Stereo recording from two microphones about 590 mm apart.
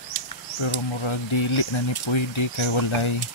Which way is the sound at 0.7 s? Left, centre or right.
Left.